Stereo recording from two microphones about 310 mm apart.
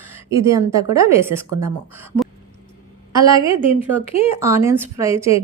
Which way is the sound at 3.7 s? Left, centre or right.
Centre.